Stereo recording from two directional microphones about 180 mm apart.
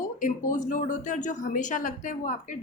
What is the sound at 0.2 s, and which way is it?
A woman's voice, 45° left (ahead or behind).